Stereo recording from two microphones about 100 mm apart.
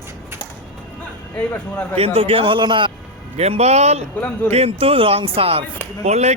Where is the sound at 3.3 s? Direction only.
90° right; by 5.7 s 65° right (ahead or behind).